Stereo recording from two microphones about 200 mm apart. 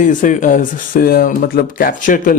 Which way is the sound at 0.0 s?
40° left (ahead or behind).